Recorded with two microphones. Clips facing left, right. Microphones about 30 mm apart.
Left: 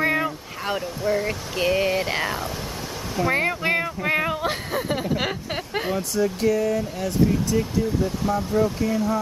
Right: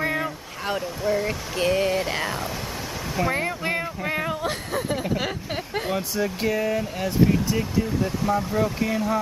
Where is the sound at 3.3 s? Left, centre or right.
Centre.